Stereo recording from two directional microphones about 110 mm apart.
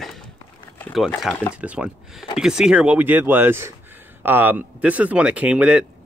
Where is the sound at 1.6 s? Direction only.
15° right (ahead or behind).